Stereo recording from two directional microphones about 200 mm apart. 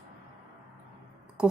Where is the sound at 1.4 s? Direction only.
5° right (ahead or behind).